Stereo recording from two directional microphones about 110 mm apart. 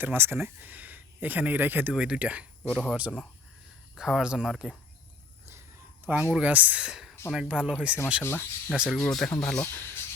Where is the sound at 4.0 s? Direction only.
5° right (ahead or behind).